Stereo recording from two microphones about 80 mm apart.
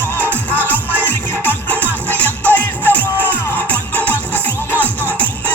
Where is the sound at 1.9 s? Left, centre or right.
Right.